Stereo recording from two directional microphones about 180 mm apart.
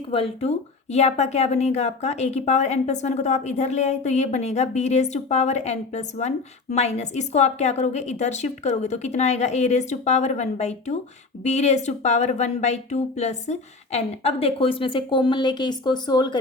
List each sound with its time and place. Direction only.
0.1 s a woman's voice: 35° left (ahead or behind)